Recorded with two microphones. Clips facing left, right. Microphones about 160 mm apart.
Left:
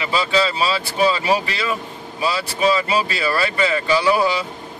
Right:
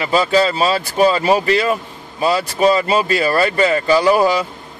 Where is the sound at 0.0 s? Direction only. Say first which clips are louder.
Right 5 dB; 45° right (ahead or behind).